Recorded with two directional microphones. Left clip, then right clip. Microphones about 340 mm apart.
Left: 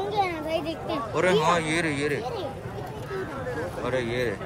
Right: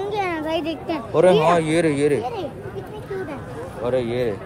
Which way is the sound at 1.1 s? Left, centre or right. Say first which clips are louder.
Right 7 dB; centre.